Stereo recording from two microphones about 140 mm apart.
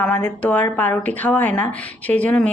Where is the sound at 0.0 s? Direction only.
10° left (ahead or behind).